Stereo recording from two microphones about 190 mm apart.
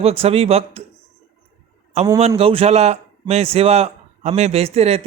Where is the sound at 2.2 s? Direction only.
30° right (ahead or behind).